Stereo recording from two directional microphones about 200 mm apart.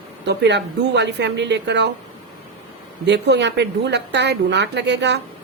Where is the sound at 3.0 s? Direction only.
60° right (ahead or behind).